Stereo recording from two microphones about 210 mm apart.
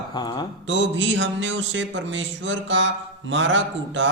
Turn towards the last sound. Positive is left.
turn(degrees=-60)  # may be behind; listen again after turning